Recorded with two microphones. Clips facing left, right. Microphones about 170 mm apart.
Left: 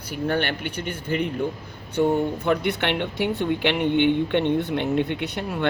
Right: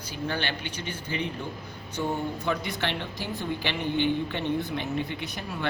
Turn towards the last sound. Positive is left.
turn(degrees=65)  # may be behind; listen again after turning